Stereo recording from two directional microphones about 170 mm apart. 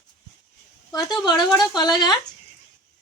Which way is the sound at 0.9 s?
25° left (ahead or behind).